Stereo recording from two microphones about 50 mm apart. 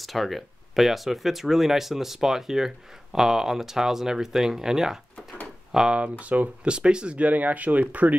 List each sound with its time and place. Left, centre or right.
0.0 s speech: centre
5.9 s speech: right
6.7 s speech: centre